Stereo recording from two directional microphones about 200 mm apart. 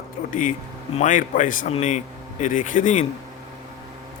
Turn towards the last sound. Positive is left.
turn(degrees=40)  # may be behind; listen again after turning